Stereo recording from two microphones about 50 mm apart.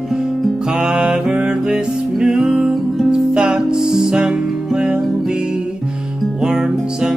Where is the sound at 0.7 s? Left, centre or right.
Centre.